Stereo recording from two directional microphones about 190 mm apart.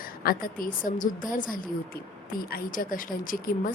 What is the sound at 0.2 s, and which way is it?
A woman's voice, 50° left (ahead or behind).